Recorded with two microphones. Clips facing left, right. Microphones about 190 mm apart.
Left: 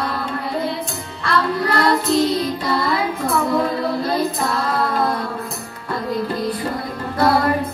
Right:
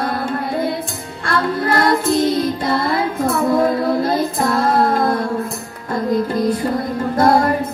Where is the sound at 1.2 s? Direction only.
50° right (ahead or behind).